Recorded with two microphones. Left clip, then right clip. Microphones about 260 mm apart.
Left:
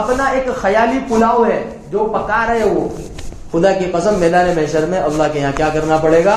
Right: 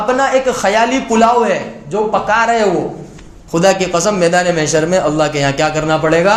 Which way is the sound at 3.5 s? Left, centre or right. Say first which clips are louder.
Right 2 dB; right.